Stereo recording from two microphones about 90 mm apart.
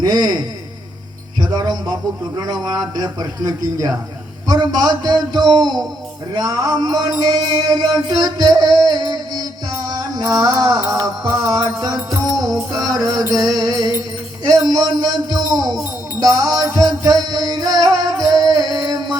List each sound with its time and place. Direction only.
0.0 s a man's voice: 45° right (ahead or behind)
7.3 s music: 50° right (ahead or behind)
10.8 s a man's voice: 45° right (ahead or behind)
12.4 s music: 45° right (ahead or behind)
14.7 s a man's voice: 50° right (ahead or behind)
17.0 s music: 45° right (ahead or behind)